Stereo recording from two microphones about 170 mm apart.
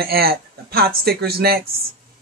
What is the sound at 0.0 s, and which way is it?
Speech, 65° right (ahead or behind).